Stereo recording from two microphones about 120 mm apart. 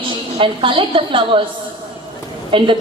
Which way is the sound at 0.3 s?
45° right (ahead or behind).